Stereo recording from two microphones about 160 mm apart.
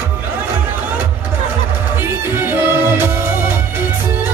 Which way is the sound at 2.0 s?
15° right (ahead or behind).